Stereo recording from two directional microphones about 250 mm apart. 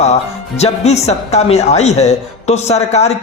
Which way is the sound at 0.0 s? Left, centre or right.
Left.